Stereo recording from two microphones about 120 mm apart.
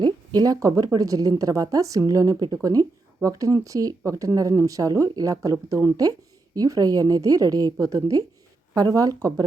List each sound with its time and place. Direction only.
0.3 s a woman's voice: 30° right (ahead or behind)